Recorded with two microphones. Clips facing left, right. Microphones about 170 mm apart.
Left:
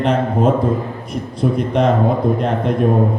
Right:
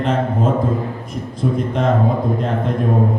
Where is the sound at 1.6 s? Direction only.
70° left (ahead or behind).